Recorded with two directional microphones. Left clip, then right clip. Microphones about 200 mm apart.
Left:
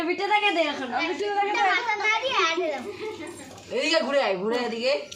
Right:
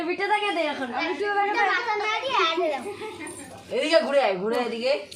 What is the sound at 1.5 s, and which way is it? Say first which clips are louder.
A child's voice: even; centre (ahead or behind).